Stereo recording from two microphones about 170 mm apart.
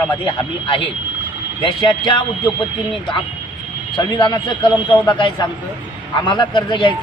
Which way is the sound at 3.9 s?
25° left (ahead or behind).